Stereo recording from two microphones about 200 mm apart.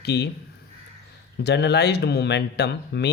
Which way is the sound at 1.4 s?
55° left (ahead or behind).